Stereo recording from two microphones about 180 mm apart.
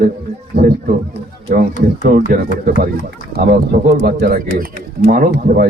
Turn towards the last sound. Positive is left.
turn(degrees=-50)  # may be behind; listen again after turning